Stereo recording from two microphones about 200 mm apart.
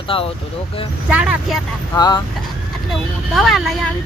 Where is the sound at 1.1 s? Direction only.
5° right (ahead or behind).